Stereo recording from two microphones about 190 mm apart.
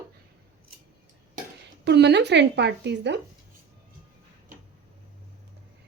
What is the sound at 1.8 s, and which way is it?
Speech, 65° right (ahead or behind).